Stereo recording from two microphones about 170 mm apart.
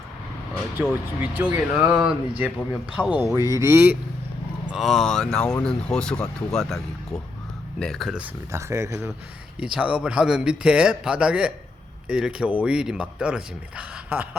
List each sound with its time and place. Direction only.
1.2 s speech: 10° right (ahead or behind)
4.7 s speech: centre (ahead or behind)
8.5 s speech: 15° right (ahead or behind)
9.6 s speech: 5° right (ahead or behind)